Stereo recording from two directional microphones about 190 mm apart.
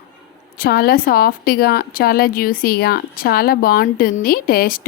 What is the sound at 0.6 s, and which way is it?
A woman's voice, 50° left (ahead or behind).